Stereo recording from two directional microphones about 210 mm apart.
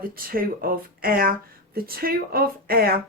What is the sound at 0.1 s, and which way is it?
A woman's voice, 45° right (ahead or behind).